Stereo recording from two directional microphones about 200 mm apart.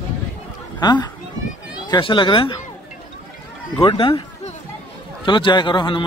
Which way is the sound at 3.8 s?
25° left (ahead or behind).